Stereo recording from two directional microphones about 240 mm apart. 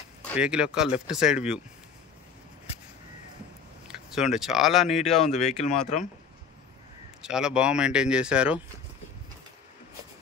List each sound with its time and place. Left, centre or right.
0.4 s speech: centre
3.8 s speech: centre
5.3 s speech: left
7.2 s speech: centre